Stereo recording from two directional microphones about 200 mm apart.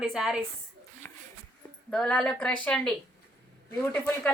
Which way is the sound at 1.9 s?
5° left (ahead or behind).